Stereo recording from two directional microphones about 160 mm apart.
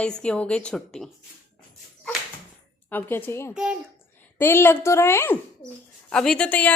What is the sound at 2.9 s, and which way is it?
Speech, 10° left (ahead or behind).